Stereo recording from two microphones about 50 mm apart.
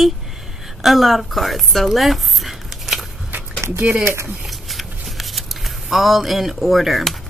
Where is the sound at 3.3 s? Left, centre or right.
Right.